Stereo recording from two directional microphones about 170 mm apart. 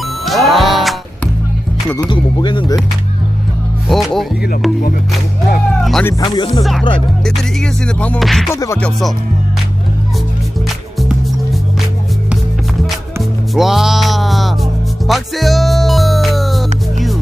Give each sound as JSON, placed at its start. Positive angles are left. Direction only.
{"t": 0.0, "sound": "music", "side_deg": 0}
{"t": 2.0, "sound": "speech", "side_deg": 25}
{"t": 3.8, "sound": "music", "side_deg": 0}
{"t": 5.8, "sound": "music", "side_deg": 0}
{"t": 6.1, "sound": "speech", "side_deg": 20}
{"t": 6.6, "sound": "music", "side_deg": 0}
{"t": 8.5, "sound": "speech", "side_deg": 20}
{"t": 8.8, "sound": "music", "side_deg": 0}
{"t": 13.5, "sound": "music", "side_deg": 0}